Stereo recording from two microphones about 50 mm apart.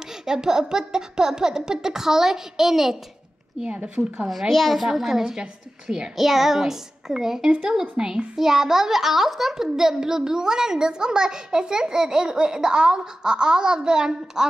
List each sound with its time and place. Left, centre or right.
0.2 s speech: centre
3.6 s speech: right
4.3 s a child's voice: centre